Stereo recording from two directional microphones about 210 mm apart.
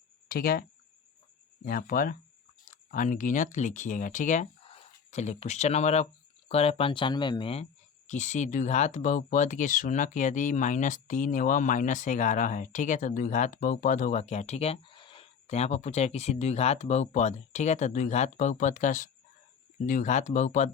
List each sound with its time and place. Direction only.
0.3 s speech: 45° left (ahead or behind)
1.6 s speech: 45° left (ahead or behind)